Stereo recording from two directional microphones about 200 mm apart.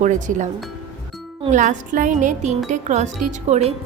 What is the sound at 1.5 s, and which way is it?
A woman's voice, 40° right (ahead or behind).